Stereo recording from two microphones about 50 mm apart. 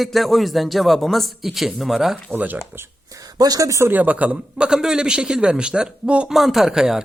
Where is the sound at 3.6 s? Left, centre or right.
Right.